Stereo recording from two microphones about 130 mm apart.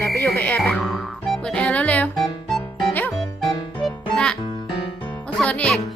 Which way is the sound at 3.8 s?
5° left (ahead or behind).